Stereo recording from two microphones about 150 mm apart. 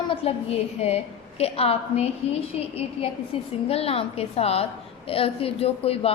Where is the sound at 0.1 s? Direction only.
40° left (ahead or behind).